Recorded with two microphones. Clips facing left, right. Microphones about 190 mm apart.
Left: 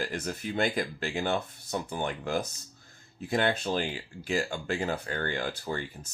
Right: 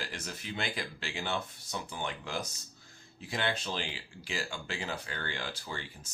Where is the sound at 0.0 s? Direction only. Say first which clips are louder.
Left 8 dB; 50° left (ahead or behind).